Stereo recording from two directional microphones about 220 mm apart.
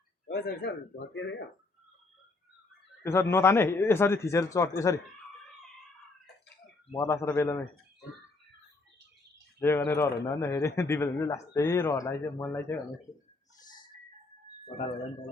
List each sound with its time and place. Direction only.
0.3 s a man's voice: 50° left (ahead or behind)
3.0 s speech: 10° left (ahead or behind)
6.9 s speech: 15° left (ahead or behind)
9.6 s speech: 10° left (ahead or behind)